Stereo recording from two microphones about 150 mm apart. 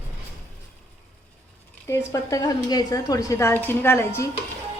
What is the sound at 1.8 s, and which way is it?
A woman's voice, 20° left (ahead or behind).